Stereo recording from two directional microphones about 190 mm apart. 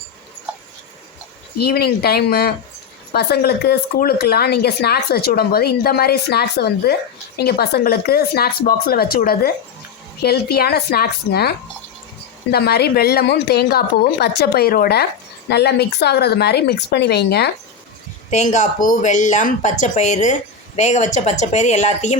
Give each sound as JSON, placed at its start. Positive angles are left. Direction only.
{"t": 1.6, "sound": "speech", "side_deg": 55}
{"t": 18.3, "sound": "speech", "side_deg": 40}